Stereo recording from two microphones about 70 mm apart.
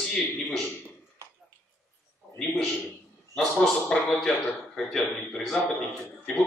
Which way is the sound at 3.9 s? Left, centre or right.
Centre.